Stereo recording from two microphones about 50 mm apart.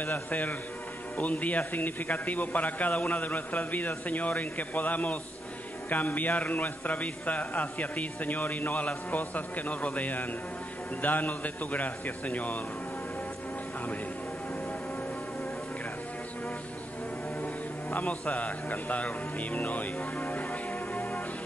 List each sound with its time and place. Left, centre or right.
0.0 s a man's voice: left
17.9 s a man's voice: left